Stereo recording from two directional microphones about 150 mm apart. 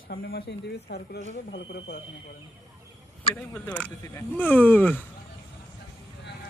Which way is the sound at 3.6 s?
10° left (ahead or behind).